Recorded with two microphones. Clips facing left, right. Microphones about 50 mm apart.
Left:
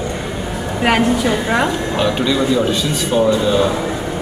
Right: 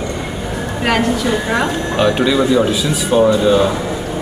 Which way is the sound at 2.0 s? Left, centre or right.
Centre.